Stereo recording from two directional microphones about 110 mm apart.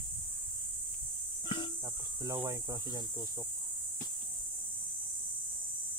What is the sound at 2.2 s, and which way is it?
Speech, 30° right (ahead or behind).